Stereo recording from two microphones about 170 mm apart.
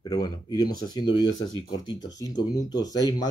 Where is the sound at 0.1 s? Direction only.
25° left (ahead or behind).